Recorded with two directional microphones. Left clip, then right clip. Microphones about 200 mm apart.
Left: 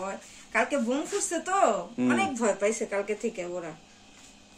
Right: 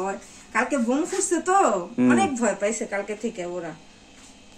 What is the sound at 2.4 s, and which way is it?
Speech, 50° left (ahead or behind).